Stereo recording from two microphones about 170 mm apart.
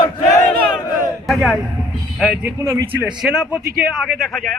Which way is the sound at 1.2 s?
Centre (ahead or behind).